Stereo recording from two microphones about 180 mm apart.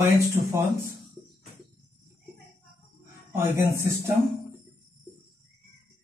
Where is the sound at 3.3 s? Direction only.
15° right (ahead or behind).